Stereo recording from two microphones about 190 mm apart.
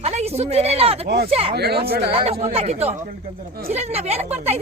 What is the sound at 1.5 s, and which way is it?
Speech, 55° right (ahead or behind).